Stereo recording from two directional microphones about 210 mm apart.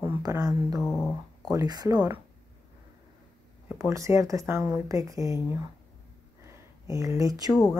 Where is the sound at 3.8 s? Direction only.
15° right (ahead or behind).